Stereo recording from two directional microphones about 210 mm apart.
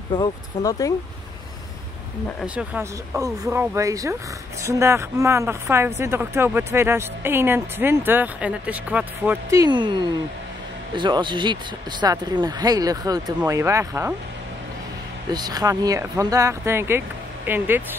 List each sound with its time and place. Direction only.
0.1 s speech: 15° left (ahead or behind)
2.4 s speech: 5° right (ahead or behind)
15.3 s speech: 20° right (ahead or behind)